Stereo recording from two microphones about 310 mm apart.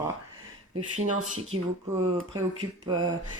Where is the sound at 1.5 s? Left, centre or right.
Right.